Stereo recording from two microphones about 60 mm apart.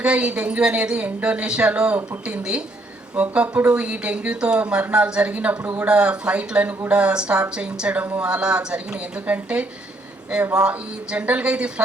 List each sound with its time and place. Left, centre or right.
0.0 s speech: centre